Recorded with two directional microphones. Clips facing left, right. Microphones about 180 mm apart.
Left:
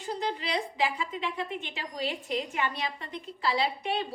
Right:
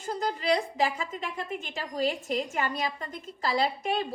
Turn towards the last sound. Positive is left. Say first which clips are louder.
# right 2 dB
turn(degrees=-45)  # may be behind; listen again after turning